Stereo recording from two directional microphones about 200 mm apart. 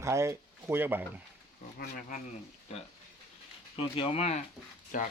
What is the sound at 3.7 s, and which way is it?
Speech, 25° left (ahead or behind).